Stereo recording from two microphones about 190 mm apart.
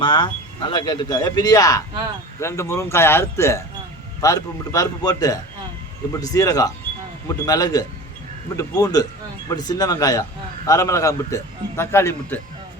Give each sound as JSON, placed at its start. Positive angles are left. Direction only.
{"t": 0.0, "sound": "speech", "side_deg": 25}